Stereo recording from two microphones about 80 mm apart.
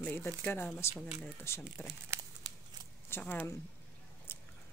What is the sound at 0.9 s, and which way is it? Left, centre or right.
Speech, centre.